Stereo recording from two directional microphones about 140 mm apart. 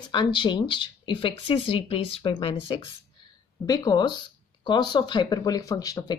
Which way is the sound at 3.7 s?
30° left (ahead or behind).